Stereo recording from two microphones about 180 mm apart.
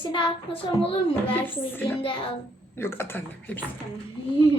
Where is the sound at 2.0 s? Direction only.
30° left (ahead or behind).